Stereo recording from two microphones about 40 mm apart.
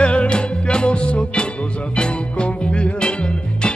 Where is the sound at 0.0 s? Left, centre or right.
Left.